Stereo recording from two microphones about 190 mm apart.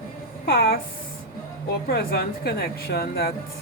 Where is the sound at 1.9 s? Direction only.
55° left (ahead or behind).